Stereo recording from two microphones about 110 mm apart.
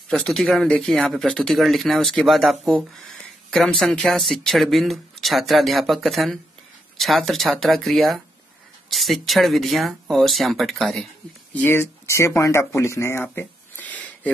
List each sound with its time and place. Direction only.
0.2 s speech: 5° left (ahead or behind)
11.5 s speech: 20° left (ahead or behind)